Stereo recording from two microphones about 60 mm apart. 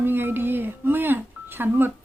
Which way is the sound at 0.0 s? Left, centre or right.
Right.